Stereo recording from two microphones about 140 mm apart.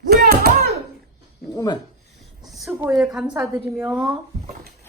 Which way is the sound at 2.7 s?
20° right (ahead or behind).